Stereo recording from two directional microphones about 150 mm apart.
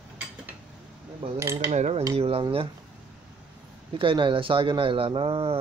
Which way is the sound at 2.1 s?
40° right (ahead or behind).